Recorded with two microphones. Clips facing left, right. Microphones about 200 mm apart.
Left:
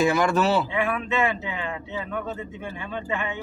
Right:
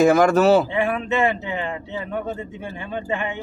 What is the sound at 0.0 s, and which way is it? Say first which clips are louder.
Speech: right 6 dB; 45° right (ahead or behind).